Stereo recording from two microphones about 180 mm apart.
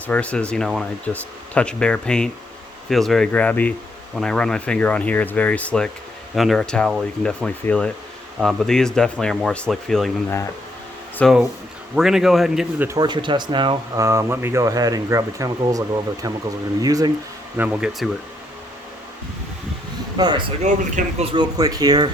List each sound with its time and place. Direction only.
0.1 s speech: 5° left (ahead or behind)
11.2 s speech: centre (ahead or behind)
12.9 s speech: 25° right (ahead or behind)
17.6 s speech: 5° right (ahead or behind)
20.1 s speech: 20° right (ahead or behind)
20.6 s speech: 40° right (ahead or behind)
21.3 s speech: 20° right (ahead or behind)